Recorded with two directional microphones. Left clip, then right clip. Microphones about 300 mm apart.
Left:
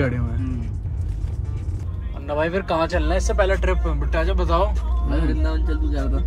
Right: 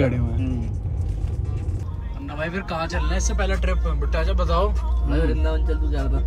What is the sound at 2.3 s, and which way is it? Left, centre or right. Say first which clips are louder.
Speech: left 7 dB; centre.